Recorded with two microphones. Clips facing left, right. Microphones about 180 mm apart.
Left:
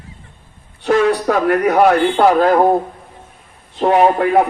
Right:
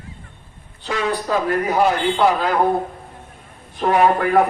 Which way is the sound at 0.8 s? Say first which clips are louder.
Left 9 dB; 65° left (ahead or behind).